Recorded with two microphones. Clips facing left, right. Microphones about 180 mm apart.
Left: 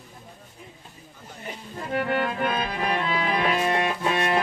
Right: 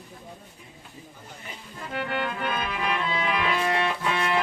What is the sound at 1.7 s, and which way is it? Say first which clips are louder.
Music: left 5 dB; 40° left (ahead or behind).